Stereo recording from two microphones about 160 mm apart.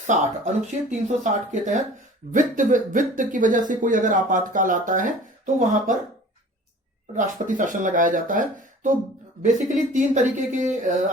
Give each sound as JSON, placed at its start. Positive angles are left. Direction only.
{"t": 0.1, "sound": "speech", "side_deg": -50}
{"t": 7.2, "sound": "speech", "side_deg": -55}